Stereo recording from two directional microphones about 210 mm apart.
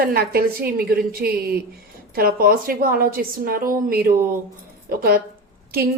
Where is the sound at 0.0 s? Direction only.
45° right (ahead or behind).